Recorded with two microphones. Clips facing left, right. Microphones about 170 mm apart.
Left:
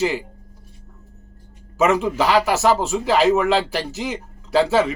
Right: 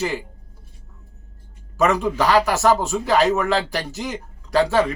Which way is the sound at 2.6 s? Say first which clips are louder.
Even; 15° left (ahead or behind).